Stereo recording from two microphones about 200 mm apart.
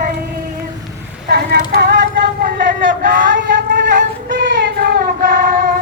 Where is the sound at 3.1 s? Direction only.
45° right (ahead or behind).